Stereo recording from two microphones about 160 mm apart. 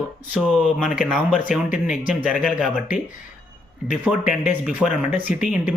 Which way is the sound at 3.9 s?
5° right (ahead or behind).